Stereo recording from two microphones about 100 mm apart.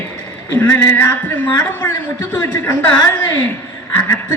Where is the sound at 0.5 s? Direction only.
20° left (ahead or behind).